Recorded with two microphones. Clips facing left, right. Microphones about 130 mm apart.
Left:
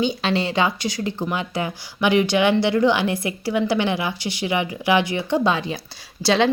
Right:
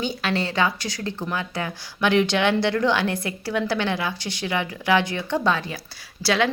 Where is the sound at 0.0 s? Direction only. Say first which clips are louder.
Left 4 dB; 20° left (ahead or behind).